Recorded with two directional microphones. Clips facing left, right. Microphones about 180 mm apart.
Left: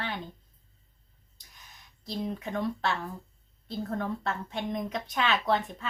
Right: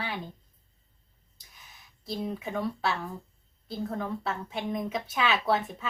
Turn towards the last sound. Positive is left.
turn(degrees=-5)  # may be behind; listen again after turning